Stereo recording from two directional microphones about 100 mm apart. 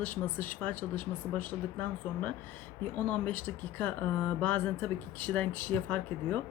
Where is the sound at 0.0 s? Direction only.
15° left (ahead or behind).